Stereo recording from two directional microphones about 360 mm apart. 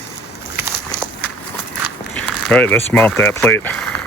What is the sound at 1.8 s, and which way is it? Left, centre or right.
Speech, centre.